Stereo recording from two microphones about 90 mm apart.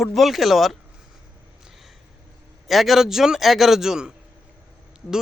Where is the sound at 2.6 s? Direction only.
Centre (ahead or behind).